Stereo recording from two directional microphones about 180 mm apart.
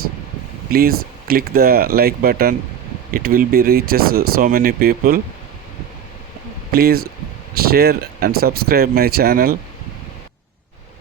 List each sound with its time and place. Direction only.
0.7 s speech: 55° right (ahead or behind)
6.7 s speech: 60° right (ahead or behind)